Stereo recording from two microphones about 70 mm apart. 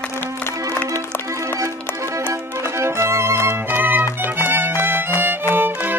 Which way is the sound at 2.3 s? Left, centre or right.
Right.